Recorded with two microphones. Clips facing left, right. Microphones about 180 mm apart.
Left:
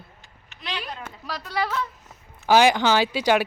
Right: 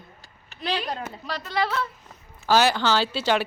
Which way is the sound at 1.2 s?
10° left (ahead or behind).